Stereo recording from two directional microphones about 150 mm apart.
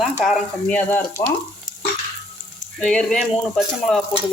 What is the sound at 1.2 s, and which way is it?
Frying, 30° left (ahead or behind).